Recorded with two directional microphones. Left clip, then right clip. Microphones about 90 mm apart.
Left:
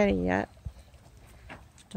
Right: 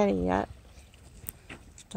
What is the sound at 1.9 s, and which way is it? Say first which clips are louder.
Beatboxing: right 1 dB; 25° left (ahead or behind).